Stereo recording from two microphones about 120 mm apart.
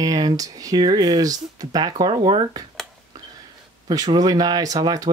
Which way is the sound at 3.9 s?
30° right (ahead or behind).